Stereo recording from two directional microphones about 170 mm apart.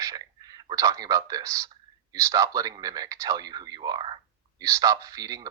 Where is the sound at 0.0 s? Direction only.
20° right (ahead or behind).